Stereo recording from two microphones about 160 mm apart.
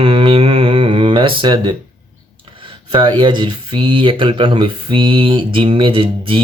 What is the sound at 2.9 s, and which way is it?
Speech, 30° right (ahead or behind).